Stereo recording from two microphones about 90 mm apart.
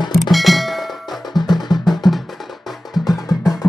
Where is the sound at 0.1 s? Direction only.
Centre (ahead or behind).